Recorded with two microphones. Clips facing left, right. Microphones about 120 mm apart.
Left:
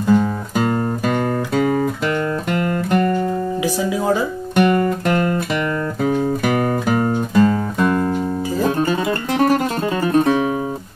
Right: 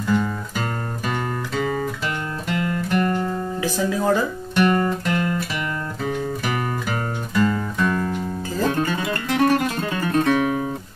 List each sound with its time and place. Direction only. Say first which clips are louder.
0.0 s music: left 6 dB; 45° left (ahead or behind)
2.0 s music: left 7 dB; 55° left (ahead or behind)
3.6 s speech: even; 10° left (ahead or behind)
4.6 s guitar: left 3 dB; 55° left (ahead or behind)
6.0 s music: left 7 dB; 50° left (ahead or behind)
8.6 s music: left 3 dB; 30° left (ahead or behind)